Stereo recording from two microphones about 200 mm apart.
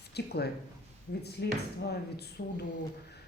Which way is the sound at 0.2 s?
55° left (ahead or behind).